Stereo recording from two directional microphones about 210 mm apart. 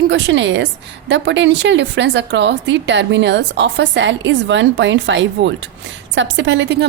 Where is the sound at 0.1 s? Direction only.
60° right (ahead or behind).